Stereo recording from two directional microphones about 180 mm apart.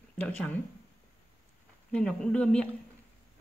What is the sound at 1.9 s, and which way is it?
Speech, 5° left (ahead or behind).